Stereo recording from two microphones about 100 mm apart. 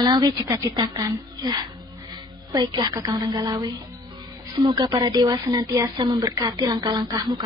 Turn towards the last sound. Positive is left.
turn(degrees=-45)  # may be behind; listen again after turning